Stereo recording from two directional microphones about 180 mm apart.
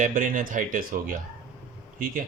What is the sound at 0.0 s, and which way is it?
Speech, 50° right (ahead or behind).